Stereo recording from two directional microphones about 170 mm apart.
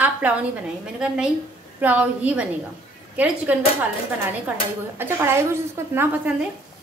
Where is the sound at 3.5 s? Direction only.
10° right (ahead or behind).